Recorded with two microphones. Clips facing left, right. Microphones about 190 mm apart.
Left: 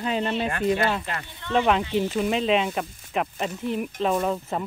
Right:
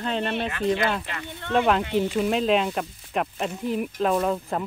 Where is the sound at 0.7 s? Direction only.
5° left (ahead or behind).